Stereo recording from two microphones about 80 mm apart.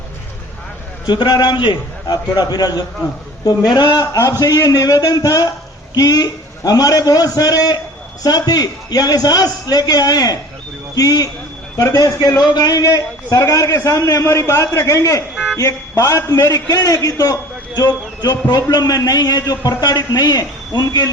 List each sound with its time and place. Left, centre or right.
1.0 s a man's voice: left
4.0 s a man's voice: left
17.7 s a man's voice: left